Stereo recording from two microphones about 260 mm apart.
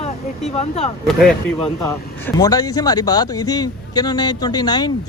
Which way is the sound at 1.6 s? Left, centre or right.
Centre.